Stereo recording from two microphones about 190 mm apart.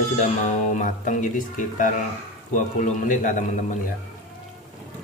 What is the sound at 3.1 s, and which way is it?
Speech, 40° left (ahead or behind).